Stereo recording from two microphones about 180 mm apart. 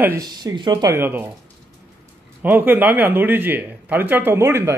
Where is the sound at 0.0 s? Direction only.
20° right (ahead or behind).